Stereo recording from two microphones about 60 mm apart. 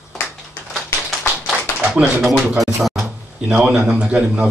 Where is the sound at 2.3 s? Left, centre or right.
Centre.